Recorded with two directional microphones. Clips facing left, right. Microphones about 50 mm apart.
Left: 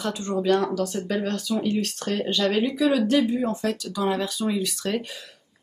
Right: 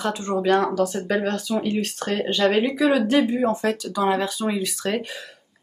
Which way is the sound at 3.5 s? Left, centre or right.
Centre.